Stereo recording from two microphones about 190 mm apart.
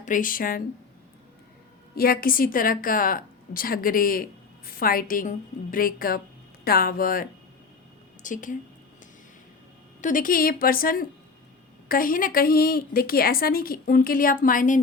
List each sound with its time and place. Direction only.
0.0 s a woman's voice: 45° left (ahead or behind)
2.0 s a woman's voice: 50° left (ahead or behind)
10.0 s a woman's voice: 45° left (ahead or behind)